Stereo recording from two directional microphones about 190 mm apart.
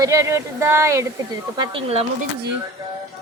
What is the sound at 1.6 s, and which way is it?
Speech, 25° right (ahead or behind).